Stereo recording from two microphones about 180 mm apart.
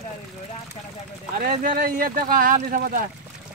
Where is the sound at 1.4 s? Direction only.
55° right (ahead or behind).